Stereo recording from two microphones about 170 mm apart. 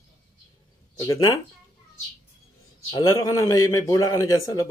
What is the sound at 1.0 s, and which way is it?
Speech, 20° left (ahead or behind).